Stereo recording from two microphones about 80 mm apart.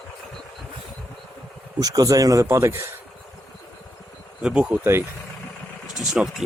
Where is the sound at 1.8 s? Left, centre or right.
Right.